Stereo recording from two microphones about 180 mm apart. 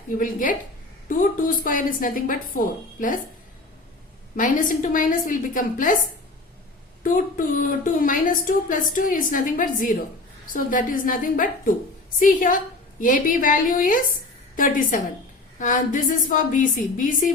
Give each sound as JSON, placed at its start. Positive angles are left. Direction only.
{"t": 0.2, "sound": "a woman's voice", "side_deg": 50}
{"t": 4.4, "sound": "a woman's voice", "side_deg": 50}
{"t": 7.0, "sound": "a woman's voice", "side_deg": 50}